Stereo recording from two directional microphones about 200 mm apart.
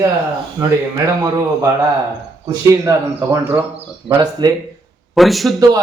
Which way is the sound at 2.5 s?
20° right (ahead or behind).